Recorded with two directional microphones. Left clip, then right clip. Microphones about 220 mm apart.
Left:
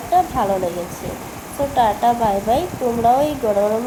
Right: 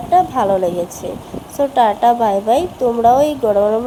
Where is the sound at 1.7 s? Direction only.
40° right (ahead or behind).